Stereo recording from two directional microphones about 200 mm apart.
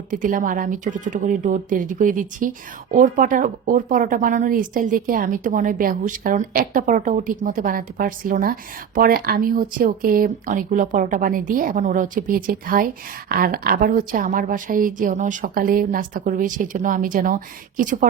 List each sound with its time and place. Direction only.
0.1 s speech: 40° right (ahead or behind)